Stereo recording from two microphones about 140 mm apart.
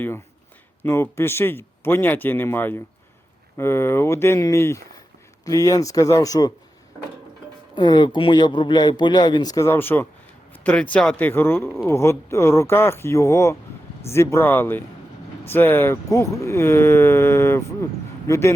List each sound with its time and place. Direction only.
0.8 s speech: 15° left (ahead or behind)
7.8 s speech: 30° left (ahead or behind)